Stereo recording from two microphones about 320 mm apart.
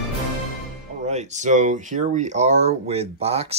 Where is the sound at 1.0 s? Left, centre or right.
Right.